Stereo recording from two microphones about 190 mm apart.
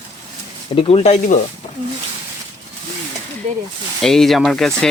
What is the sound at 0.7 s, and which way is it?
Speech, 35° left (ahead or behind).